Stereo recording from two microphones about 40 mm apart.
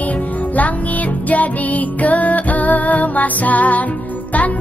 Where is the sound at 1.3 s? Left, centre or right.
Left.